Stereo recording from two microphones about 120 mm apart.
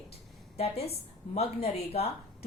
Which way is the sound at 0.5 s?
60° left (ahead or behind).